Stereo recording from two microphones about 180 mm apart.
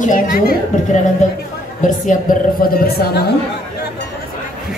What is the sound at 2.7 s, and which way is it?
Speech, 60° left (ahead or behind).